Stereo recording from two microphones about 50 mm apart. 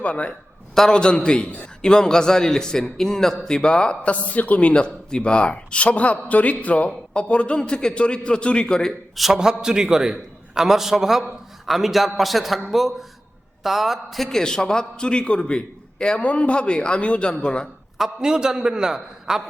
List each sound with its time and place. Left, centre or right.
0.0 s a man's voice: left
4.7 s a man's voice: centre
9.1 s a man's voice: centre; by 17.7 s left
17.9 s a man's voice: centre